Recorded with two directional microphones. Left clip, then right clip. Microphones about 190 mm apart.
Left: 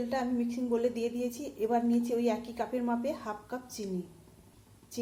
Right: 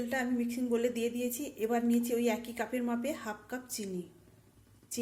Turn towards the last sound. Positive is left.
turn(degrees=-15)  # may be behind; listen again after turning